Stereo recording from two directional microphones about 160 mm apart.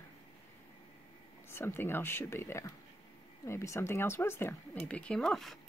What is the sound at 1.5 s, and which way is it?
Speech, 15° left (ahead or behind).